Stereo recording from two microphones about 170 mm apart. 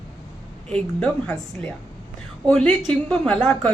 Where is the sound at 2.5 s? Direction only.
5° left (ahead or behind).